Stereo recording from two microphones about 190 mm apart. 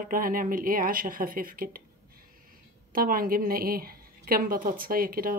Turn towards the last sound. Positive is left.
turn(degrees=-50)  # may be behind; listen again after turning